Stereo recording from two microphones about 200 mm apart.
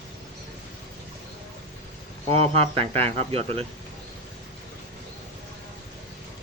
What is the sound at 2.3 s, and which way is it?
Speech, 30° right (ahead or behind).